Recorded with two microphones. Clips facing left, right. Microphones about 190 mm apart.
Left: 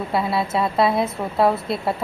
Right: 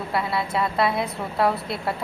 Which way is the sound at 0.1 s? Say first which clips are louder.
Left 3 dB; 25° left (ahead or behind).